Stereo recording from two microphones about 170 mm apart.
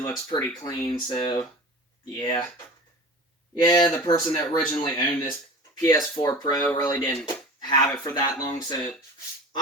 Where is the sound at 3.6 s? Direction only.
25° left (ahead or behind).